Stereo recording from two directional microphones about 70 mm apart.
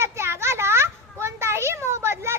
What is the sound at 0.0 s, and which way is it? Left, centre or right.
Children playing, right.